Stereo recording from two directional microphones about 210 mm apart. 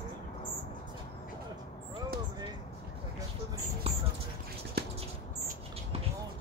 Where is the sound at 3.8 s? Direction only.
30° right (ahead or behind).